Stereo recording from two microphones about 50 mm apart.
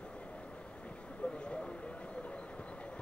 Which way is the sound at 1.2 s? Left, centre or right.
Left.